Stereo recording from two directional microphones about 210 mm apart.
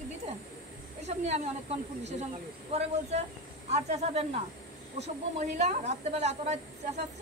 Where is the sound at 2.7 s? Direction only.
30° right (ahead or behind).